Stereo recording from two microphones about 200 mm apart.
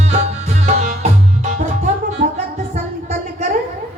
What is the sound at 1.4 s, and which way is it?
Music, 35° right (ahead or behind).